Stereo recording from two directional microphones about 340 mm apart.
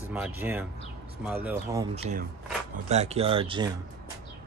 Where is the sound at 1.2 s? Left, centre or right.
Centre.